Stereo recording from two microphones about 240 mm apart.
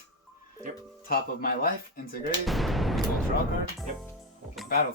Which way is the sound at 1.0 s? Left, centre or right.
Left.